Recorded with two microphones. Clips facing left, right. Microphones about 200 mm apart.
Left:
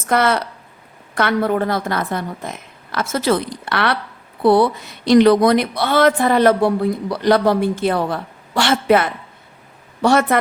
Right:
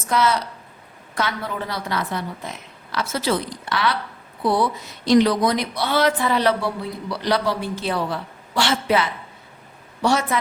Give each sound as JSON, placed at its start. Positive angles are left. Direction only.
{"t": 0.1, "sound": "a woman's voice", "side_deg": 60}